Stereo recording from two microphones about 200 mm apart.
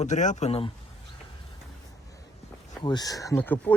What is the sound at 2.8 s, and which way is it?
Speech, 20° left (ahead or behind).